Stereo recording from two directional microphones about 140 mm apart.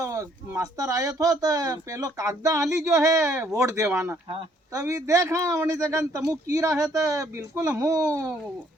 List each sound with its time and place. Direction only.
0.0 s speech: 20° right (ahead or behind)